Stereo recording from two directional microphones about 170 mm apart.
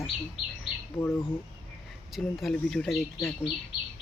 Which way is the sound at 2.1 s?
Centre (ahead or behind).